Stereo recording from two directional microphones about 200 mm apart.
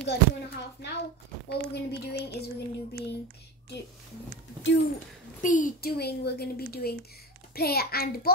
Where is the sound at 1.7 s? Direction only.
55° left (ahead or behind).